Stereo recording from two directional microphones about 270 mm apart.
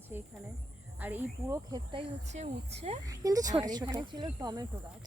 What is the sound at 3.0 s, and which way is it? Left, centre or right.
Speech, centre.